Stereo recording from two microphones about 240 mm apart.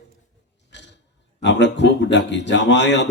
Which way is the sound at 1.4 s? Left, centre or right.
Left.